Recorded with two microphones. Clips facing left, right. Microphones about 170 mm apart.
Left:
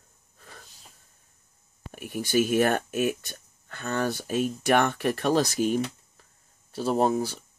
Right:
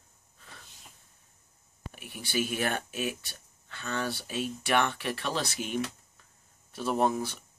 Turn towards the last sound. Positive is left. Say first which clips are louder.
# left 4 dB
turn(degrees=30)  # may be behind; listen again after turning